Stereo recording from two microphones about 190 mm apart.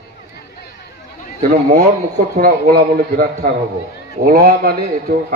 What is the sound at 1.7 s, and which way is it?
A man's voice, 45° right (ahead or behind).